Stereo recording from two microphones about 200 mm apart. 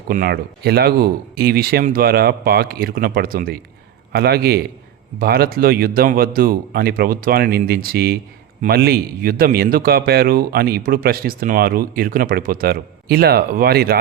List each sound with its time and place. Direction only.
0.1 s speech: 50° right (ahead or behind)